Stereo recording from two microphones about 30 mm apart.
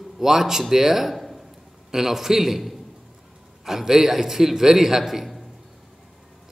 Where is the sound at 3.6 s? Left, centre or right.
Centre.